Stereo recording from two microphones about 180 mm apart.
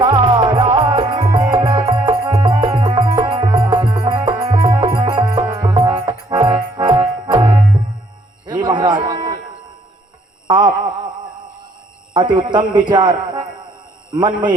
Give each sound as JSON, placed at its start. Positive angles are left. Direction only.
{"t": 0.0, "sound": "music", "side_deg": -25}
{"t": 10.4, "sound": "a sound", "side_deg": -25}
{"t": 12.1, "sound": "speech", "side_deg": -25}